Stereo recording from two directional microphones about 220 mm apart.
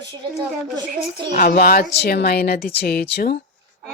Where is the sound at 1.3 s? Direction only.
40° left (ahead or behind).